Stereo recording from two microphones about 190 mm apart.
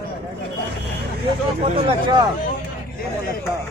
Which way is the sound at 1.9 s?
25° right (ahead or behind).